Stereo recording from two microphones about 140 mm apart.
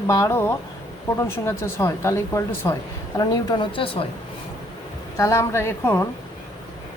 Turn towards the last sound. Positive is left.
turn(degrees=15)  # may be behind; listen again after turning